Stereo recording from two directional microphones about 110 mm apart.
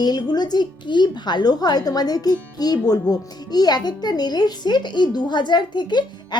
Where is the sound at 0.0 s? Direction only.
40° left (ahead or behind).